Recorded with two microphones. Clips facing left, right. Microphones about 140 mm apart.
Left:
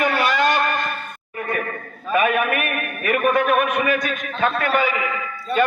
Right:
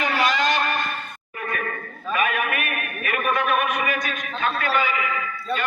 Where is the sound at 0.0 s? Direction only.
50° left (ahead or behind).